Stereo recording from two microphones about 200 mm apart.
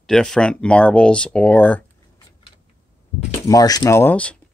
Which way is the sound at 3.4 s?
20° left (ahead or behind).